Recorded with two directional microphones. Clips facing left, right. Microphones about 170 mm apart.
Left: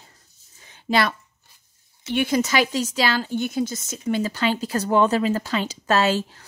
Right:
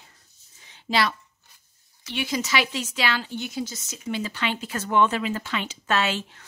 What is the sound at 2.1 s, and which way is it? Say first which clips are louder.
A woman's voice: left 6 dB; 50° left (ahead or behind).